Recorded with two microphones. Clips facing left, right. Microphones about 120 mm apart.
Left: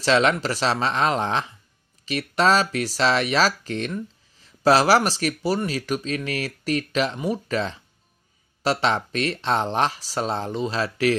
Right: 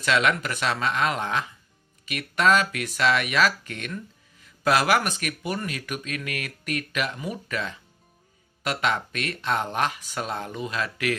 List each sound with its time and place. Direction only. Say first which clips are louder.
0.0 s speech: left 4 dB; 30° left (ahead or behind)